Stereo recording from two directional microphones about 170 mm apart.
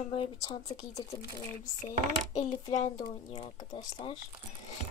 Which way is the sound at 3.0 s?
35° left (ahead or behind).